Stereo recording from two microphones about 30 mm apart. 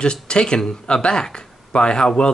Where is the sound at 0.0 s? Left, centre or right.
Left.